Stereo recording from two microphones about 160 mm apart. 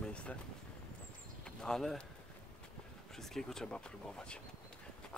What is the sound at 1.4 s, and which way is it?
Speech, 5° left (ahead or behind).